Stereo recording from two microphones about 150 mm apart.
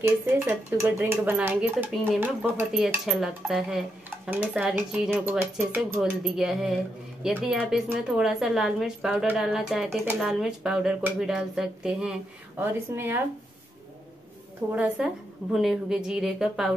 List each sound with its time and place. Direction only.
0.0 s speech: 15° right (ahead or behind)
3.1 s speech: centre (ahead or behind)
14.7 s speech: 10° right (ahead or behind)